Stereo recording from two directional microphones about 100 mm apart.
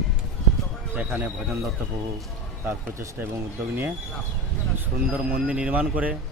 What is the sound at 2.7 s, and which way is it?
Speech, 25° right (ahead or behind).